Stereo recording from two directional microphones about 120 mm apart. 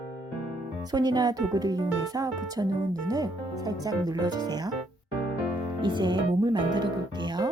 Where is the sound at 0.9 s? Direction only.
35° right (ahead or behind).